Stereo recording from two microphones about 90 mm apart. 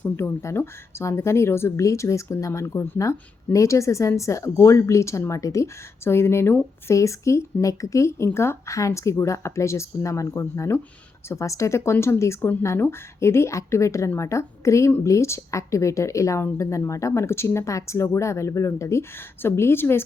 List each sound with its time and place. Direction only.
0.2 s a woman's voice: 30° left (ahead or behind)